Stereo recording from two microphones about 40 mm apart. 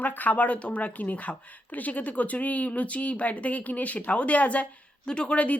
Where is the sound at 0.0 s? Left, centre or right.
Left.